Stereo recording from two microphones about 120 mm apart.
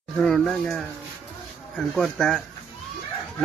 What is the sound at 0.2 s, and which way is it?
Speech, 5° left (ahead or behind).